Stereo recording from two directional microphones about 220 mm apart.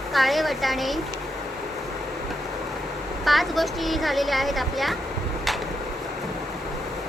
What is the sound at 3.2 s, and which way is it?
Speech, centre (ahead or behind).